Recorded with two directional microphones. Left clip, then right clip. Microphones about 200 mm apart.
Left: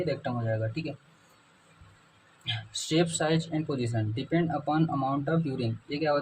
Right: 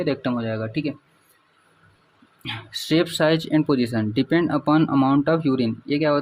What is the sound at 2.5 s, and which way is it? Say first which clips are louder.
Speech: right 7 dB; 45° right (ahead or behind).